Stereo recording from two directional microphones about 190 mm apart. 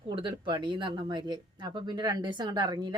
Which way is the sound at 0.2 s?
25° right (ahead or behind).